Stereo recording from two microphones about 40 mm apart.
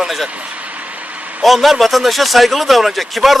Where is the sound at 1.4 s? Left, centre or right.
Centre.